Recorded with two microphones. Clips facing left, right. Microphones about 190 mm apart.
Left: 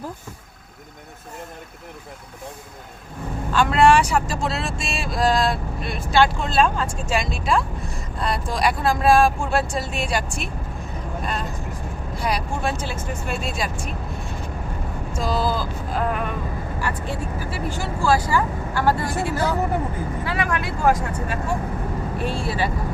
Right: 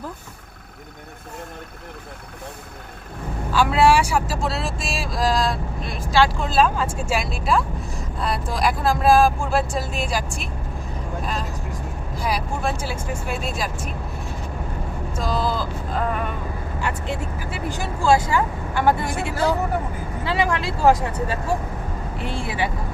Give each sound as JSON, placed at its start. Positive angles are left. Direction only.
{"t": 3.5, "sound": "speech", "side_deg": -5}
{"t": 12.2, "sound": "speech", "side_deg": 0}
{"t": 15.3, "sound": "vehicle", "side_deg": 5}
{"t": 16.8, "sound": "speech", "side_deg": -20}